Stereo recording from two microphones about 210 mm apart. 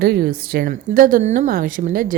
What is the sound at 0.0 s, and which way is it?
A woman's voice, 50° right (ahead or behind).